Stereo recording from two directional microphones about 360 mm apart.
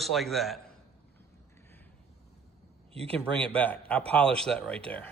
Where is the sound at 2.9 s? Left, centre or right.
Centre.